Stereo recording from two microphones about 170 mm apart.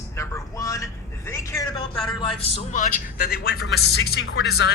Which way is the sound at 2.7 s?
50° left (ahead or behind).